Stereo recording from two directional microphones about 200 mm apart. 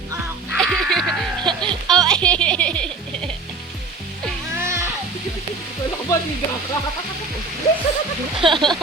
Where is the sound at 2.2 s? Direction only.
5° left (ahead or behind).